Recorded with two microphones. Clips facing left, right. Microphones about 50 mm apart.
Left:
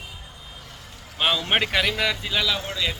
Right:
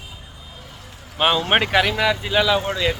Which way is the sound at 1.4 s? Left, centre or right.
Centre.